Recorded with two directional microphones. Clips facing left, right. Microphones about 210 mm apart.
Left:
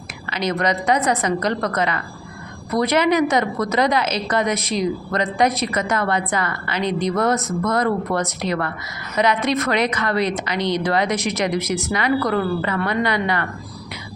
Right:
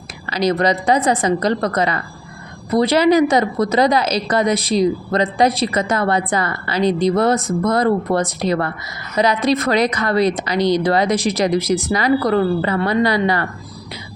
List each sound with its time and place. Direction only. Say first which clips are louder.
0.3 s a woman's voice: right 5 dB; 35° right (ahead or behind)